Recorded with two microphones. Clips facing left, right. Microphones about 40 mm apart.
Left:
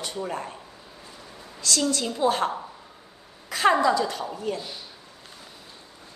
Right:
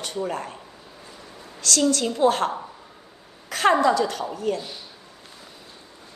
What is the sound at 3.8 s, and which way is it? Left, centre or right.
Speech, right.